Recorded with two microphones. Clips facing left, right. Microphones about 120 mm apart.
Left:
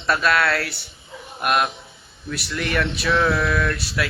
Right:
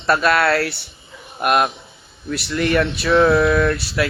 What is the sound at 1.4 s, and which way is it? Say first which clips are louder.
Speech: right 4 dB; 45° right (ahead or behind).